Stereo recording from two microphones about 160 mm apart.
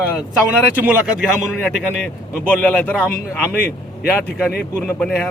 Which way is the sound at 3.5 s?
80° left.